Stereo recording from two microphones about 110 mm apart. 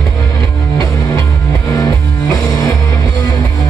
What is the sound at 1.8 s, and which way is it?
Music, 30° left (ahead or behind).